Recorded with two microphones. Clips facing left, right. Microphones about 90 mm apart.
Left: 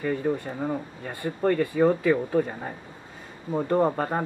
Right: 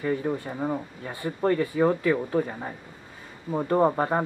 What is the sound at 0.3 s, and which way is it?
Speech, 10° right (ahead or behind).